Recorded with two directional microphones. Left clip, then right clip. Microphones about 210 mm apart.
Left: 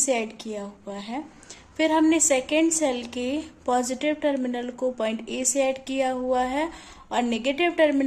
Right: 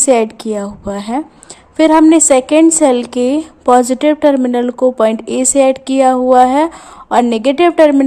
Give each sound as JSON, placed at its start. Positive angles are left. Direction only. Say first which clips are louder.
{"t": 0.0, "sound": "a woman's voice", "louder": "right 14 dB", "side_deg": -35}